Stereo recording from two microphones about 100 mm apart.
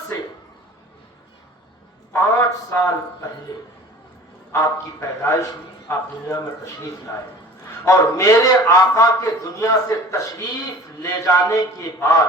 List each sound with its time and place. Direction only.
2.1 s a man's voice: 30° left (ahead or behind)
4.5 s a man's voice: 30° left (ahead or behind)
7.9 s a man's voice: 35° left (ahead or behind)